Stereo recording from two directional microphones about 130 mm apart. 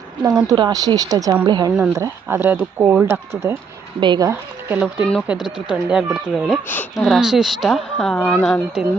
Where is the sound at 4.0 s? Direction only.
35° right (ahead or behind).